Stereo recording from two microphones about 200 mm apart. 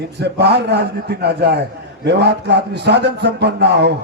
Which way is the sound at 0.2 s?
55° right (ahead or behind).